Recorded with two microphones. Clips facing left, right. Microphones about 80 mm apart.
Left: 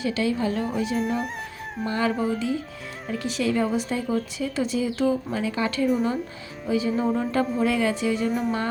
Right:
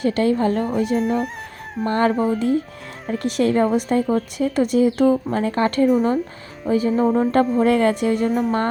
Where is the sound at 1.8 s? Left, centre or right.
Right.